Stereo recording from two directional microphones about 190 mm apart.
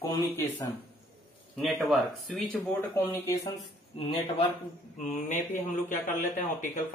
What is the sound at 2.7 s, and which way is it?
Speech, 10° left (ahead or behind).